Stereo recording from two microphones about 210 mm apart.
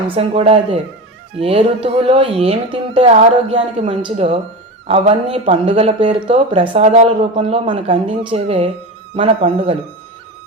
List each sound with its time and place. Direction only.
0.1 s speech: 25° right (ahead or behind)